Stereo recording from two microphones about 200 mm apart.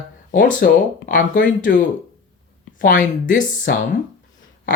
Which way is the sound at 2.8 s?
40° left (ahead or behind).